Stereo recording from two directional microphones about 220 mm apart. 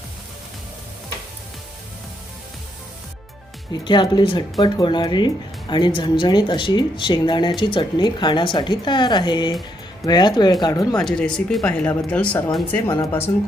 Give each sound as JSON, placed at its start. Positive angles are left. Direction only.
{"t": 3.7, "sound": "speech", "side_deg": 20}
{"t": 10.9, "sound": "speech", "side_deg": 5}